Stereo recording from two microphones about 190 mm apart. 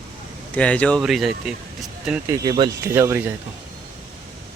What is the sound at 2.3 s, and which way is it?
Speech, 20° right (ahead or behind).